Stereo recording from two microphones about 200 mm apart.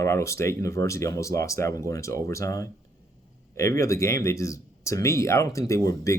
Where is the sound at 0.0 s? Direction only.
15° left (ahead or behind).